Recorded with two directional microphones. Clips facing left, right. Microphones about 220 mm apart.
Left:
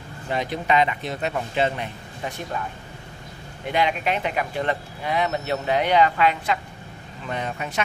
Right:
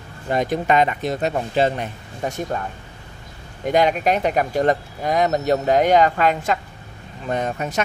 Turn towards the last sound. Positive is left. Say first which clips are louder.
# right 5 dB
turn(degrees=-45)  # may be behind; listen again after turning